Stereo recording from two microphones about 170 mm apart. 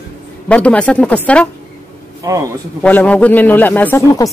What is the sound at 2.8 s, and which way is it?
Speech, 5° left (ahead or behind).